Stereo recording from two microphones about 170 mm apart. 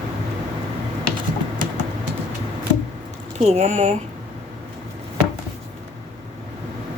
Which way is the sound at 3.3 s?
40° right (ahead or behind).